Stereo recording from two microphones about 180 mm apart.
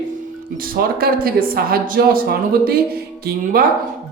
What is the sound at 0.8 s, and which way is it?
Speech, 55° right (ahead or behind).